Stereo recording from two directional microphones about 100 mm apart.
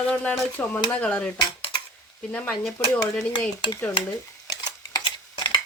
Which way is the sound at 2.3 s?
15° left (ahead or behind).